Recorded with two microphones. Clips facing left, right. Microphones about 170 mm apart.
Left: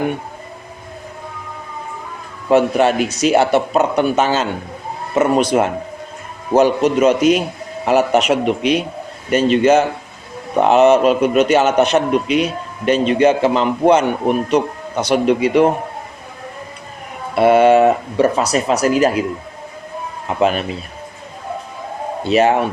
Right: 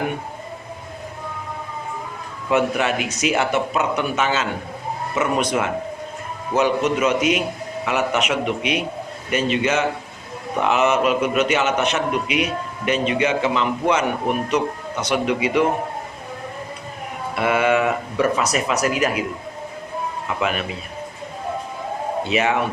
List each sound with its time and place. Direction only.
2.5 s a man's voice: 35° left (ahead or behind)
17.3 s a man's voice: 35° left (ahead or behind)
20.2 s a man's voice: 35° left (ahead or behind)
22.2 s a man's voice: 35° left (ahead or behind)